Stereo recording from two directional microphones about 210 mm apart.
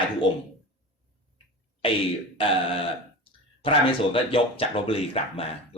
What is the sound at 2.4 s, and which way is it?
Speech, 25° left (ahead or behind).